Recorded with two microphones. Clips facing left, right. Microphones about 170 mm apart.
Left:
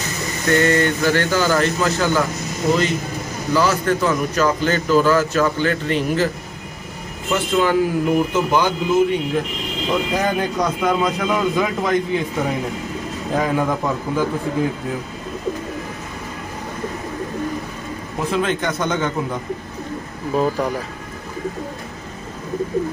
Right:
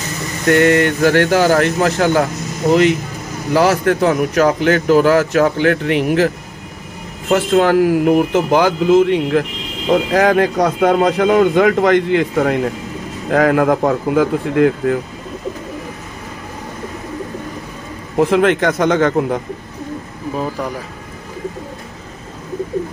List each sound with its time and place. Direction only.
0.5 s a man's voice: 75° right (ahead or behind)
18.2 s speech: 90° right